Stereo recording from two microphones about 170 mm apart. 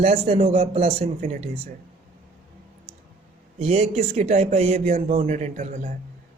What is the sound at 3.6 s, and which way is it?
Speech, 40° right (ahead or behind).